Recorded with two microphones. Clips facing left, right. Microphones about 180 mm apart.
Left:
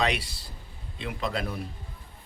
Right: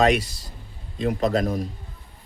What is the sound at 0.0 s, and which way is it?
A man's voice, 45° right (ahead or behind).